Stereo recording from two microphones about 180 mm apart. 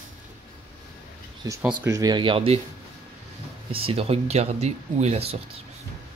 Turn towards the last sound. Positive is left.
turn(degrees=-35)  # may be behind; listen again after turning